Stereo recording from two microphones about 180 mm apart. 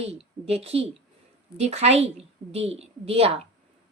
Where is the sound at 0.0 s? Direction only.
35° right (ahead or behind).